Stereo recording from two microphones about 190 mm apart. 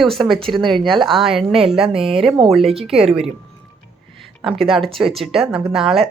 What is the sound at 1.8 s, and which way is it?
Speech, 30° right (ahead or behind).